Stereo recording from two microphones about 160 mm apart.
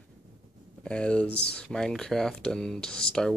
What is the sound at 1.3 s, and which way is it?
Speech, 90° left.